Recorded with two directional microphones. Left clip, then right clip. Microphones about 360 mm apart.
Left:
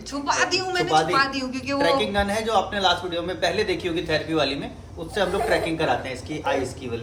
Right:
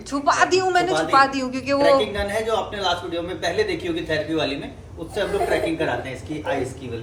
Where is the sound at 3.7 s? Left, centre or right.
Left.